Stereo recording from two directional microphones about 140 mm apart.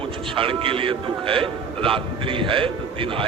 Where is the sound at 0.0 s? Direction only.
40° right (ahead or behind).